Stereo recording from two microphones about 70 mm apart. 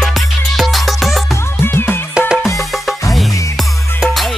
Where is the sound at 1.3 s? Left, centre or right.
Left.